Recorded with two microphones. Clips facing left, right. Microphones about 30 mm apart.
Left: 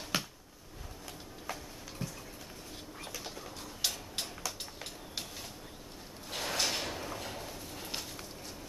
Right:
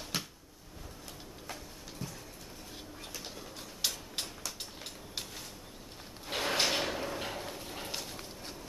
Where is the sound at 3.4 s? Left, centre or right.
Centre.